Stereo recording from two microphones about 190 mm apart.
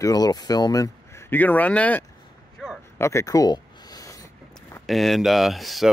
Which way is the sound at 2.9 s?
15° left (ahead or behind).